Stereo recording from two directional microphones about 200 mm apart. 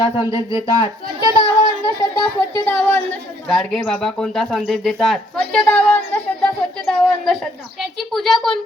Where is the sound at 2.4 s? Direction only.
10° left (ahead or behind).